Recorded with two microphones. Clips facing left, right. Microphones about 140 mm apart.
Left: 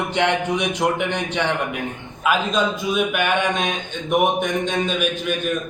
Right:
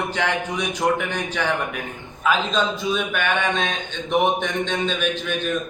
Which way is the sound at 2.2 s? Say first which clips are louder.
Left 1 dB; 10° left (ahead or behind).